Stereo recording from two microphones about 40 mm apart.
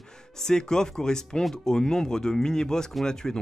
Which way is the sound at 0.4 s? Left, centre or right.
Centre.